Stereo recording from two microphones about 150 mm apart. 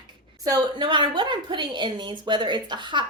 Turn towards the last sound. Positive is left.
turn(degrees=-30)  # may be behind; listen again after turning